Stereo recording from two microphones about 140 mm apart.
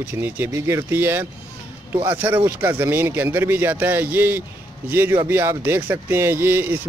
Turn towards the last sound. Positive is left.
turn(degrees=-15)  # may be behind; listen again after turning